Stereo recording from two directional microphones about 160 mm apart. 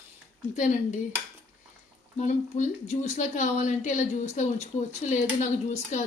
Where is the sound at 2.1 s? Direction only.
45° left (ahead or behind).